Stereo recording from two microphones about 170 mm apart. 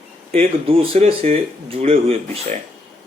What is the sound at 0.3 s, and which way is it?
Speech, 35° right (ahead or behind).